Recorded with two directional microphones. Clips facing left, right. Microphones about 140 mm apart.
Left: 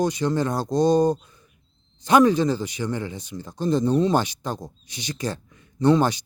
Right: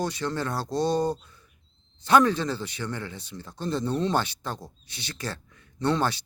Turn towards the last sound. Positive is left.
turn(degrees=15)  # may be behind; listen again after turning